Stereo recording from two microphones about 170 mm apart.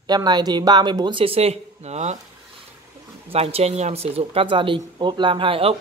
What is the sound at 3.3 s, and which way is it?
Speech, 35° right (ahead or behind).